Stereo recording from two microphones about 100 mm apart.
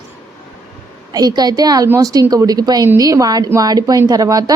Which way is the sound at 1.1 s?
40° right (ahead or behind).